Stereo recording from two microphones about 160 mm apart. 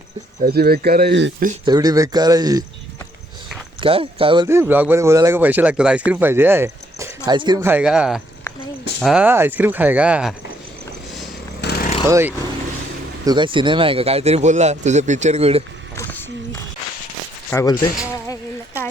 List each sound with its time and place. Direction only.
0.4 s speech: 75° right (ahead or behind)
1.6 s speech: 25° right (ahead or behind)
3.8 s speech: 35° right (ahead or behind)
4.4 s speech: 15° right (ahead or behind)
7.3 s speech: 25° right (ahead or behind)
7.6 s speech: 10° right (ahead or behind)
11.6 s a sound: 80° left
12.0 s speech: 20° right (ahead or behind)
13.2 s speech: 30° right (ahead or behind)
16.0 s a sound: 10° left (ahead or behind)
17.5 s speech: 20° left (ahead or behind)